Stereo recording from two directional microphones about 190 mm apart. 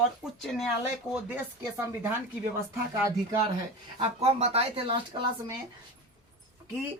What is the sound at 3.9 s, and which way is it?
Speech, 30° right (ahead or behind).